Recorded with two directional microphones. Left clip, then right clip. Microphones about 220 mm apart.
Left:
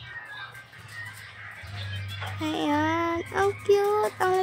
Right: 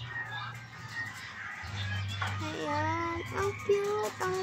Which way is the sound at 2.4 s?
45° left (ahead or behind).